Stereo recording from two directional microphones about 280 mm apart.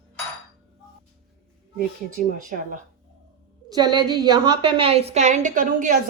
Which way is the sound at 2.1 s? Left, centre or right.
Right.